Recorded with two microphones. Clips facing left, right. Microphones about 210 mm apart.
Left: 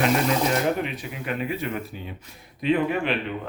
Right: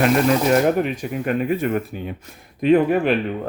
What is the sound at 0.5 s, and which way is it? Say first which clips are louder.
Speech: right 7 dB; 45° right (ahead or behind).